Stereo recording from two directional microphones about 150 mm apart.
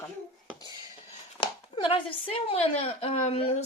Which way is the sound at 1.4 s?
35° left (ahead or behind).